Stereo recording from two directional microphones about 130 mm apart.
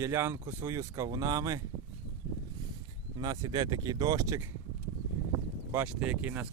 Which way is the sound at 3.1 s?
30° right (ahead or behind).